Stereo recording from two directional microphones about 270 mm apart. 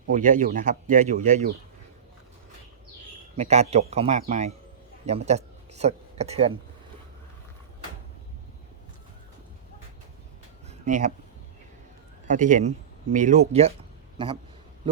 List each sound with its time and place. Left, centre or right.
0.1 s speech: right
3.3 s speech: right
10.7 s a sound: right
12.3 s a man's voice: right